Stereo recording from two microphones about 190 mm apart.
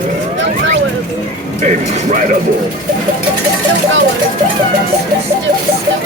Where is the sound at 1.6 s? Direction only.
40° right (ahead or behind).